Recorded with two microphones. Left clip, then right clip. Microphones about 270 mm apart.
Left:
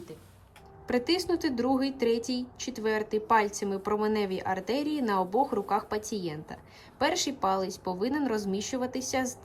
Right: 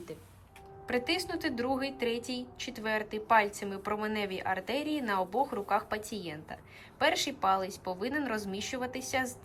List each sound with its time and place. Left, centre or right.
0.9 s a woman's voice: centre